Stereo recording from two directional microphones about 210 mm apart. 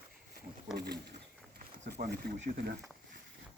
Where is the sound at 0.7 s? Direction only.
50° right (ahead or behind).